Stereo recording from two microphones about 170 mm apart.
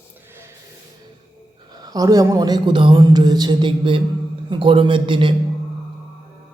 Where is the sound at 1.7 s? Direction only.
25° right (ahead or behind).